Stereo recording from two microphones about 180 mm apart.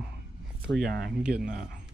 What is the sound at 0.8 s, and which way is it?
Speech, 60° right (ahead or behind).